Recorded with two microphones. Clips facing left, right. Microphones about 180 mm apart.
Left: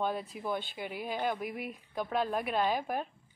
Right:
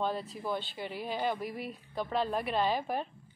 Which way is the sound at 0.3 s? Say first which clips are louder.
Even; 10° left (ahead or behind).